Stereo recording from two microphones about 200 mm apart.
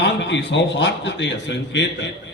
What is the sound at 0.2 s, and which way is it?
A man's voice, 65° left (ahead or behind).